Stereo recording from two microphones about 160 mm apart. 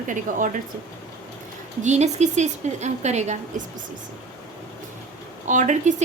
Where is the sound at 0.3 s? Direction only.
60° right (ahead or behind).